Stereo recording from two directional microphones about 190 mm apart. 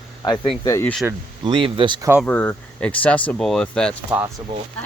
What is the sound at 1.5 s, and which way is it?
Speech, 25° right (ahead or behind).